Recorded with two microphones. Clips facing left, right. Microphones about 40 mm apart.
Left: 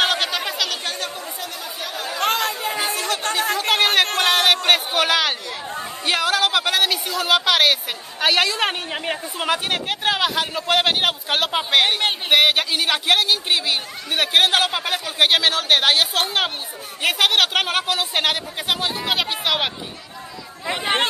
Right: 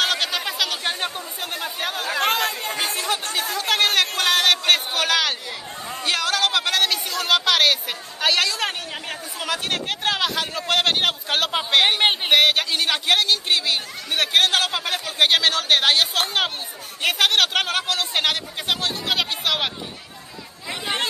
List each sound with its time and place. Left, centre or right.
0.1 s a sound: centre
0.8 s chatter: right
1.4 s chatter: right
2.1 s chatter: centre
3.5 s chatter: centre
4.2 s a sound: centre
6.0 s speech: centre
9.7 s speech: centre
20.6 s speech: left